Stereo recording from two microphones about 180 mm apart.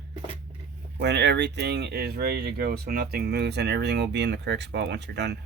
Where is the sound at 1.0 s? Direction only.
70° right (ahead or behind).